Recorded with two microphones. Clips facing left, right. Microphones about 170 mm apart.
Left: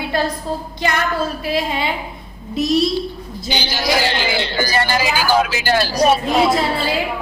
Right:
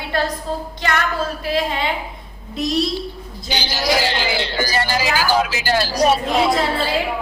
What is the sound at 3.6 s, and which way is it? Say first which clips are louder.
A woman's voice: even; 60° left (ahead or behind).